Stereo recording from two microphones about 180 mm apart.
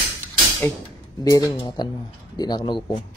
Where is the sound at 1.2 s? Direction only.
20° left (ahead or behind).